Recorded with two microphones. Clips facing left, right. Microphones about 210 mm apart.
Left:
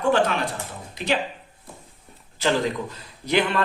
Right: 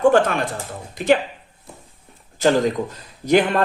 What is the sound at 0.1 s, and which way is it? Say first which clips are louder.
Speech: right 4 dB; 50° right (ahead or behind).